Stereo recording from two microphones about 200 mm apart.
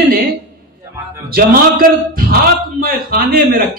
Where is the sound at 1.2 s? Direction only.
50° right (ahead or behind).